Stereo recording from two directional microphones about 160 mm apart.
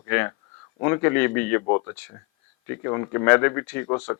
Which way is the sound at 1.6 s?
25° left (ahead or behind).